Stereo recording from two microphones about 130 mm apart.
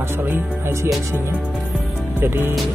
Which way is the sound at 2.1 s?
15° right (ahead or behind).